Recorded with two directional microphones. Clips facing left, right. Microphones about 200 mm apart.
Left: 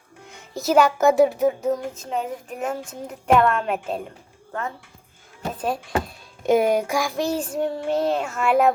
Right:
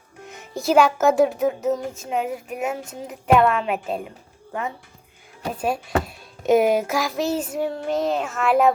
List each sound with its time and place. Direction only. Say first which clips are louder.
0.3 s speech: right 1 dB; 15° right (ahead or behind)
5.5 s speech: right 2 dB; 10° right (ahead or behind)